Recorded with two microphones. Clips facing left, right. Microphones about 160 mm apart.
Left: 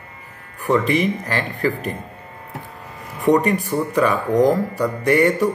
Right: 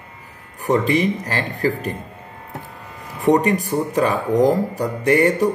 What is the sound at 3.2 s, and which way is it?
Speech, 40° right (ahead or behind).